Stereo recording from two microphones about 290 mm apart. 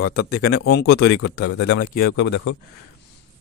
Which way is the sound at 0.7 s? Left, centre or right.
Left.